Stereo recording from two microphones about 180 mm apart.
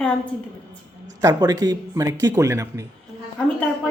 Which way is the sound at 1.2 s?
20° right (ahead or behind).